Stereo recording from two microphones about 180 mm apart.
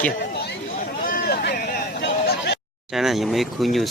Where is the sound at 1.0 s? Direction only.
55° left (ahead or behind); by 2.6 s 75° left (ahead or behind).